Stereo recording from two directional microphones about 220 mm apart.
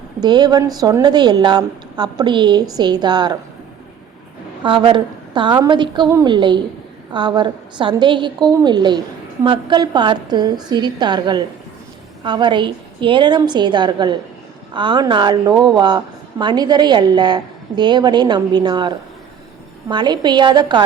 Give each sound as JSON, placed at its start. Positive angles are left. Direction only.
{"t": 0.2, "sound": "a woman's voice", "side_deg": -20}
{"t": 4.6, "sound": "a woman's voice", "side_deg": -20}